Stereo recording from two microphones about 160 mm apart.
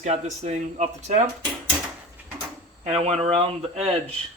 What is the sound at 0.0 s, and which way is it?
Speech, 45° right (ahead or behind).